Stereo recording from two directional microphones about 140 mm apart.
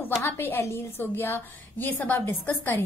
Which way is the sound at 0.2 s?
15° left (ahead or behind).